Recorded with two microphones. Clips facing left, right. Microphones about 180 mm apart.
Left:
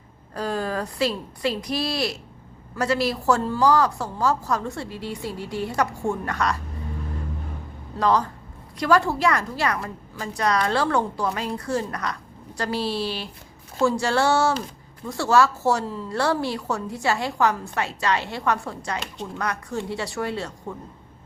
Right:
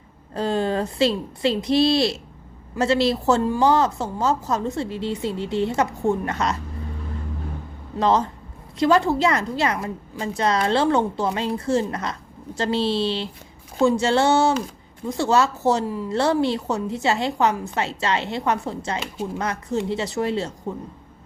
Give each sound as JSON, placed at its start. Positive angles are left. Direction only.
{"t": 0.3, "sound": "a woman's voice", "side_deg": -25}
{"t": 7.9, "sound": "a woman's voice", "side_deg": -25}
{"t": 18.9, "sound": "speech", "side_deg": -5}
{"t": 19.4, "sound": "a woman's voice", "side_deg": -25}